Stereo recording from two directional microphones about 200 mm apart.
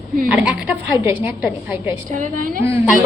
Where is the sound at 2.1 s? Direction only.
45° right (ahead or behind).